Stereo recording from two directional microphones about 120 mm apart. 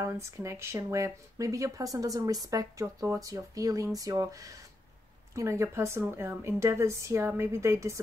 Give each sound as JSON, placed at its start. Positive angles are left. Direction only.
{"t": 0.0, "sound": "speech", "side_deg": -25}